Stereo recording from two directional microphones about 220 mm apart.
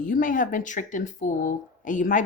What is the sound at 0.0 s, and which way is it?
Speech, 40° left (ahead or behind).